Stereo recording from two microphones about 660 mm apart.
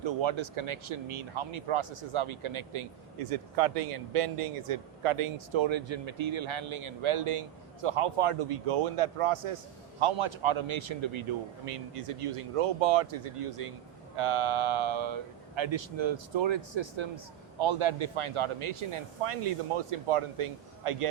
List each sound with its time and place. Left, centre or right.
0.0 s speech: right